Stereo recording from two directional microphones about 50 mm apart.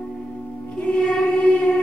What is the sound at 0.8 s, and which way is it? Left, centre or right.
Music, left.